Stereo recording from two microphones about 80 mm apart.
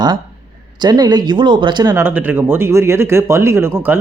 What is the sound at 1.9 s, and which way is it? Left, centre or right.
Speech, right.